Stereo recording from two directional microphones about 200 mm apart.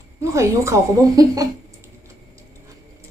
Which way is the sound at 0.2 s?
15° right (ahead or behind).